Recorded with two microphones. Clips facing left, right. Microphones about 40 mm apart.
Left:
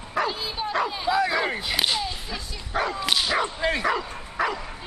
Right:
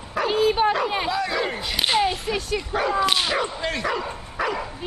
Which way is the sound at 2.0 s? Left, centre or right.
Right.